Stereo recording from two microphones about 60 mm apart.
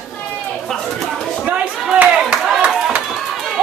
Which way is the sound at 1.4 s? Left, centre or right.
Right.